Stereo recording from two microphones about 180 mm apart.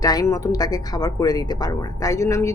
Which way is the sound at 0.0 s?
20° left (ahead or behind).